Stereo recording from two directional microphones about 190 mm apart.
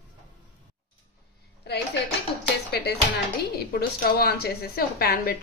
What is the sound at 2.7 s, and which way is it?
Speech, 60° left (ahead or behind).